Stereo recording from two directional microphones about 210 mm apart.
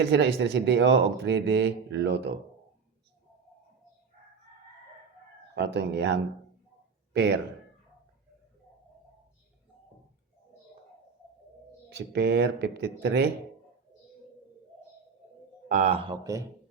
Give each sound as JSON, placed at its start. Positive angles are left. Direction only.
{"t": 0.0, "sound": "speech", "side_deg": -55}
{"t": 5.5, "sound": "speech", "side_deg": -55}
{"t": 11.9, "sound": "speech", "side_deg": -55}
{"t": 15.7, "sound": "a man's voice", "side_deg": -30}